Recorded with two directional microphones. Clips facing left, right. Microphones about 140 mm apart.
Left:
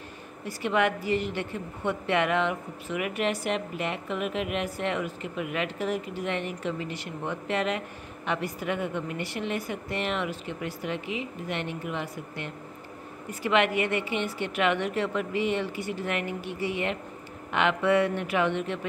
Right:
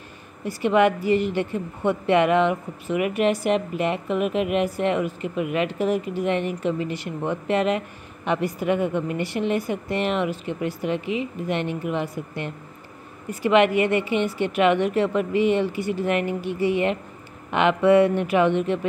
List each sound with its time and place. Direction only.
0.5 s a woman's voice: 20° right (ahead or behind)